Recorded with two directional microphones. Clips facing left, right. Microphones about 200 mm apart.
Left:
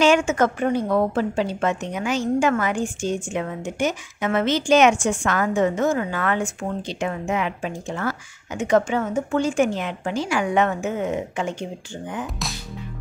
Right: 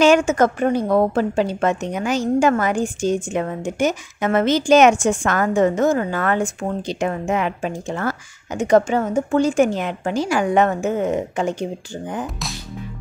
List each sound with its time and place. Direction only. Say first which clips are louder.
0.0 s a woman's voice: right 3 dB; 40° right (ahead or behind)